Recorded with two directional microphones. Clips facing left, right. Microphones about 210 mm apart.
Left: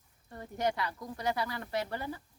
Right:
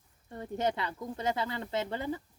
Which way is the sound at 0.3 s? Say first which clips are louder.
Right 1 dB; 25° right (ahead or behind).